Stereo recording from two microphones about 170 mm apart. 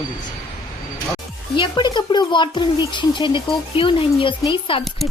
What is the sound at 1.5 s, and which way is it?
Speech, 30° left (ahead or behind).